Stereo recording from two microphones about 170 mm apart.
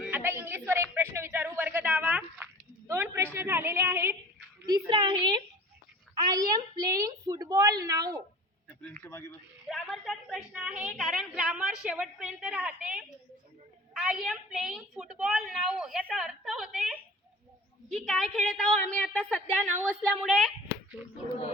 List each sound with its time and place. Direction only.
0.0 s a sound: 10° right (ahead or behind)
3.3 s a woman's voice: 15° right (ahead or behind)
4.6 s a woman's voice: 25° right (ahead or behind)
8.8 s speech: 10° left (ahead or behind)
9.6 s a woman's voice: centre (ahead or behind)